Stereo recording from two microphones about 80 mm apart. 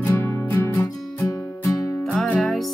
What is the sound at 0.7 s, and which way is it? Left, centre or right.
Music, left.